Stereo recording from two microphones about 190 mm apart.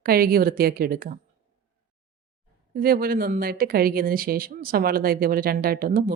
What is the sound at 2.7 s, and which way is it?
Speech, 50° right (ahead or behind).